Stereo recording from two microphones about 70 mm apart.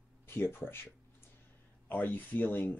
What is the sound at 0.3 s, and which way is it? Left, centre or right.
Speech, left.